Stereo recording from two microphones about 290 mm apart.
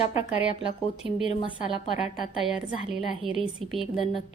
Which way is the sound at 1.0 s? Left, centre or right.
Centre.